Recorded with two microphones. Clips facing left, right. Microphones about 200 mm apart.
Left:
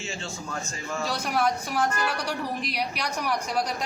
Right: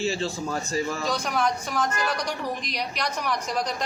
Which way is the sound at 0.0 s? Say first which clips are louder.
Right 9 dB; 35° right (ahead or behind).